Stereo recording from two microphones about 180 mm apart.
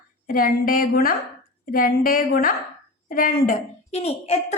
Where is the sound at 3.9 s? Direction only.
35° left (ahead or behind).